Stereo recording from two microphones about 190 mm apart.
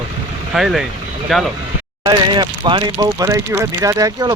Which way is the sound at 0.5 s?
Centre (ahead or behind).